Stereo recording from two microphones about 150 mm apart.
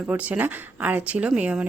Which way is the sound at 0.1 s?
10° right (ahead or behind).